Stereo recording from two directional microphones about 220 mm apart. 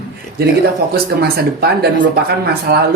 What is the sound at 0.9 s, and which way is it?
Speech, 45° right (ahead or behind).